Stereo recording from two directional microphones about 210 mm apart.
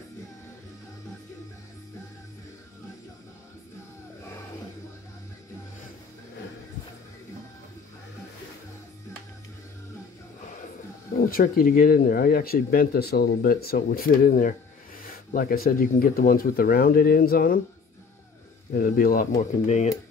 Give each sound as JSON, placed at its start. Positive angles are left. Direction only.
{"t": 11.2, "sound": "speech", "side_deg": 45}
{"t": 18.8, "sound": "speech", "side_deg": 45}
{"t": 19.3, "sound": "speech", "side_deg": 30}